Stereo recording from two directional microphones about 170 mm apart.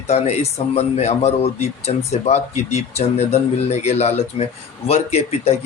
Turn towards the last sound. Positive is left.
turn(degrees=40)  # may be behind; listen again after turning